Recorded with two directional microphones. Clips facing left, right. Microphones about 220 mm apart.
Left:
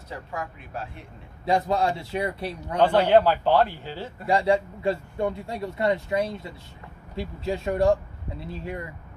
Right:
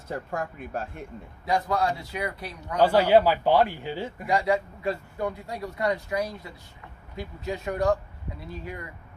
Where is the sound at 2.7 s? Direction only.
5° right (ahead or behind).